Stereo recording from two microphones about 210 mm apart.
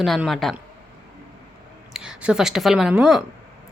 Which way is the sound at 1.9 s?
5° right (ahead or behind).